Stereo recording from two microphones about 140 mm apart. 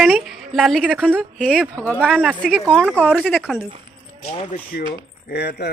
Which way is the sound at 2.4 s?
5° left (ahead or behind).